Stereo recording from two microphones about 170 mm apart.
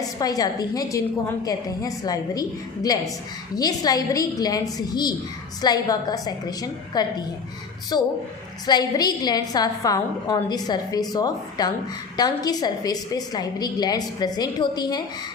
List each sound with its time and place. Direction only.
0.0 s a woman's voice: 20° left (ahead or behind)